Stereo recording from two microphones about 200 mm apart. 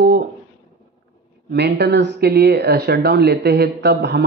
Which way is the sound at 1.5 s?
55° right (ahead or behind).